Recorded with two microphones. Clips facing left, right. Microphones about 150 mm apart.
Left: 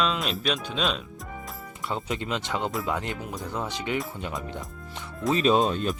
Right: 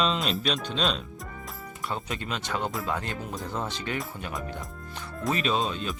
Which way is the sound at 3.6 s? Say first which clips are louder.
Left 3 dB; 15° left (ahead or behind).